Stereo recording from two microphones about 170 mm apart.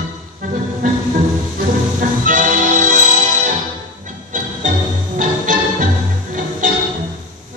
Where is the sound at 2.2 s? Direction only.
50° right (ahead or behind).